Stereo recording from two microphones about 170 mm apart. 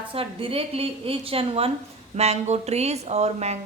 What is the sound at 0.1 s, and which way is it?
A woman's voice, 35° right (ahead or behind).